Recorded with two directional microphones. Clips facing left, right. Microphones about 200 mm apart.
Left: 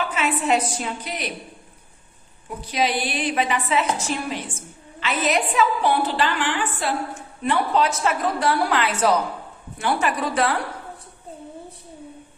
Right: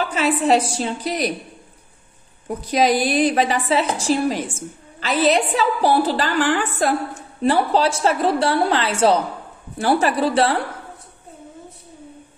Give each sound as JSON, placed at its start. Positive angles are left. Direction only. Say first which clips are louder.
{"t": 0.0, "sound": "a woman's voice", "louder": "right 4 dB", "side_deg": -35}
{"t": 2.4, "sound": "a woman's voice", "louder": "right 6 dB", "side_deg": -40}